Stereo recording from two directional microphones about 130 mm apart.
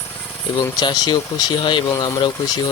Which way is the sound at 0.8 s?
35° left (ahead or behind).